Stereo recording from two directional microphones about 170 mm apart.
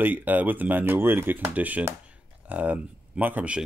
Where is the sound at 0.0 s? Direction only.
10° right (ahead or behind).